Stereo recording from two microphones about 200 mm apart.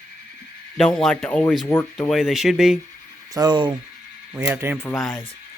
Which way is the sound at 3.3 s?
20° right (ahead or behind).